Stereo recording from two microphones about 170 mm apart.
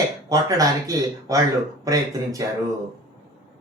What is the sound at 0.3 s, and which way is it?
Speech, 20° right (ahead or behind).